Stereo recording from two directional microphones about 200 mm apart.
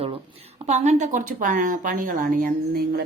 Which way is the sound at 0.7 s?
35° right (ahead or behind).